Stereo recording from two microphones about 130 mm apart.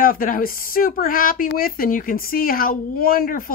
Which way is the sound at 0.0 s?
90° left.